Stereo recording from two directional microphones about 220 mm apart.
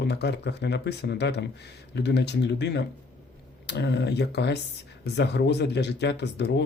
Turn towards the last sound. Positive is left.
turn(degrees=50)  # may be behind; listen again after turning